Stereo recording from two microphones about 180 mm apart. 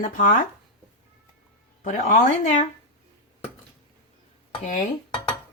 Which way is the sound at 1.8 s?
45° left (ahead or behind).